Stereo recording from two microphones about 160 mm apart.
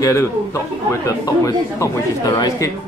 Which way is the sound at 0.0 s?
20° left (ahead or behind).